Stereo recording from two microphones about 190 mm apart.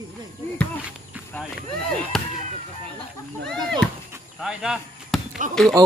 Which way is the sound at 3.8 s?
5° left (ahead or behind).